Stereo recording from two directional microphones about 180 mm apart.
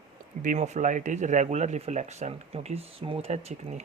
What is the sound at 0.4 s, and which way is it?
Speech, 40° right (ahead or behind).